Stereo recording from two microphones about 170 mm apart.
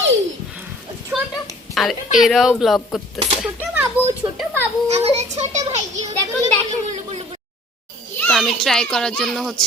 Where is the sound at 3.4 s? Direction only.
10° right (ahead or behind).